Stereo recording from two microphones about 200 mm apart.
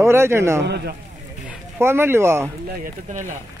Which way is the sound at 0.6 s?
55° right (ahead or behind).